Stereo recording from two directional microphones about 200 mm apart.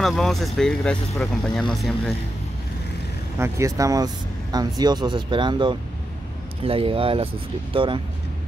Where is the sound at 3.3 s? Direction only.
15° right (ahead or behind).